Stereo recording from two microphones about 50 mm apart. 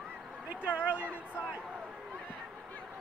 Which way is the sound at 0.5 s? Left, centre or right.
Right.